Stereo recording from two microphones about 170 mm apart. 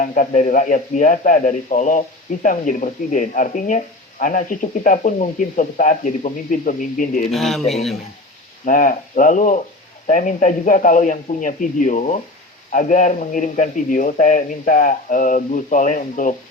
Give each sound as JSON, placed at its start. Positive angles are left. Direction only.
{"t": 0.0, "sound": "a man's voice", "side_deg": 50}
{"t": 7.3, "sound": "speech", "side_deg": 0}
{"t": 8.6, "sound": "a man's voice", "side_deg": 50}